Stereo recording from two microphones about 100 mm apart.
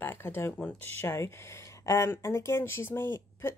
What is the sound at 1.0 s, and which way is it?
Speech, 25° left (ahead or behind).